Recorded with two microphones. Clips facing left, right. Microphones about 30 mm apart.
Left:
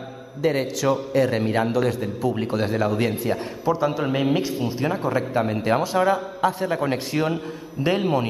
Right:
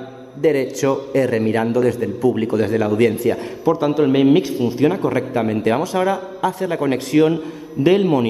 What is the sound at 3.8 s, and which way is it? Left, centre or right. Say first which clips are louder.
A man's voice: right 10 dB; centre.